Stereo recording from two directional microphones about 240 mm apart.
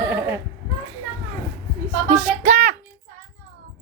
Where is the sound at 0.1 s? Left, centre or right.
Centre.